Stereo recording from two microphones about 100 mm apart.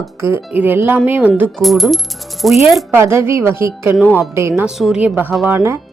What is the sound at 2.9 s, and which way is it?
A woman's voice, 25° right (ahead or behind).